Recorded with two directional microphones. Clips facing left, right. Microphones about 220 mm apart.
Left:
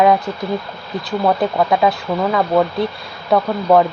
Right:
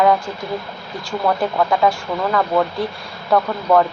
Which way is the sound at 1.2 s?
20° left (ahead or behind).